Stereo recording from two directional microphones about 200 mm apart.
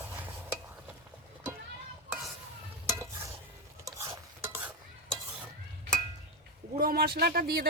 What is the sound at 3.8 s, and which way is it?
Stir, 15° right (ahead or behind).